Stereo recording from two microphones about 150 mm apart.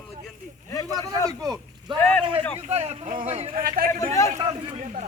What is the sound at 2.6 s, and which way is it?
Speech, 45° right (ahead or behind).